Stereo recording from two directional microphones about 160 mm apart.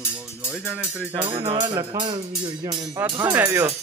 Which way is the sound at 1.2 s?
35° right (ahead or behind).